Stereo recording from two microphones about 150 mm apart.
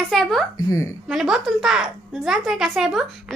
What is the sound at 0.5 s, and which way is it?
Speech, 20° left (ahead or behind).